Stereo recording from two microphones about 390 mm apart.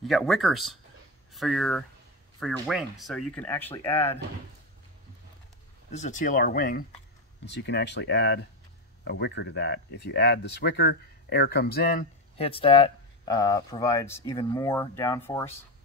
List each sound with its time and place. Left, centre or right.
0.0 s speech: centre
5.9 s speech: centre